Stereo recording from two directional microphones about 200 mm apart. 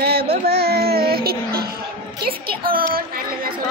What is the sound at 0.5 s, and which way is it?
Child singing, 55° right (ahead or behind).